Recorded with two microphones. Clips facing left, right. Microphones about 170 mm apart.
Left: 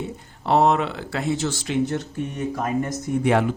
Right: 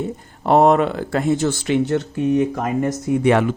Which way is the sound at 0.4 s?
50° right (ahead or behind).